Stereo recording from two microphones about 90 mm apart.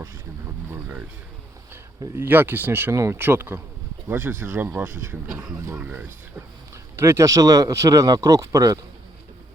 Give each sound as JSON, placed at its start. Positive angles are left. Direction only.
{"t": 0.7, "sound": "a sound", "side_deg": -20}
{"t": 2.1, "sound": "speech", "side_deg": -25}
{"t": 5.3, "sound": "speech", "side_deg": -5}
{"t": 5.6, "sound": "speech", "side_deg": -25}
{"t": 6.9, "sound": "speech", "side_deg": -30}